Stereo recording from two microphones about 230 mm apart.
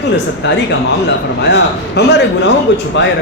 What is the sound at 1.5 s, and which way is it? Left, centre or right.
A man's voice, left.